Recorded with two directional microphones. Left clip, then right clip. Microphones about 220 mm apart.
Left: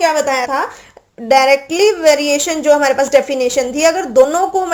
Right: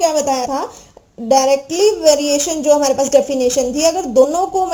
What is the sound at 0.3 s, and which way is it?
A woman's voice, 5° left (ahead or behind).